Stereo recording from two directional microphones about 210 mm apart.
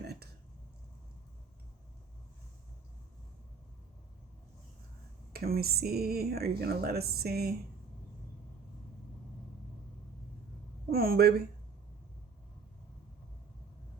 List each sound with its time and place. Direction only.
0.0 s a sound: 50° right (ahead or behind)
5.3 s speech: 45° right (ahead or behind)
10.9 s speech: 45° right (ahead or behind)